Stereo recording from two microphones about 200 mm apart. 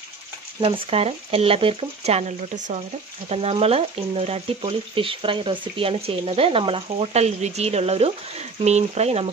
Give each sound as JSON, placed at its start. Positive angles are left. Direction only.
{"t": 0.6, "sound": "speech", "side_deg": -30}